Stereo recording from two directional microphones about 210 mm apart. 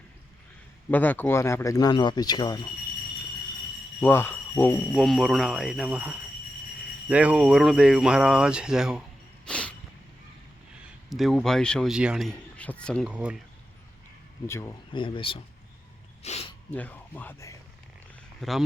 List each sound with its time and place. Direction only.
0.9 s speech: 10° left (ahead or behind)
4.0 s speech: 10° left (ahead or behind)
9.5 s a sound: 5° left (ahead or behind)
11.1 s speech: centre (ahead or behind)
14.4 s speech: 15° left (ahead or behind)
16.2 s a sound: 30° left (ahead or behind)
16.7 s speech: 10° left (ahead or behind)
18.3 s speech: centre (ahead or behind)